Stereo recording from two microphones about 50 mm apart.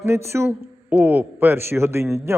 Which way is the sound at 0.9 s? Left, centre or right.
Right.